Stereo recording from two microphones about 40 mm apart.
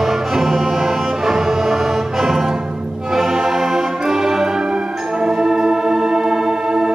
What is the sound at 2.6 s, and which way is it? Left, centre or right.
Music, right.